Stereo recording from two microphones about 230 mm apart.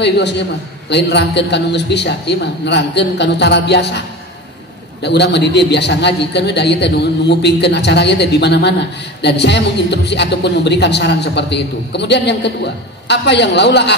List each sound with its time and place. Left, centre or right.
0.8 s speech: left
5.0 s speech: left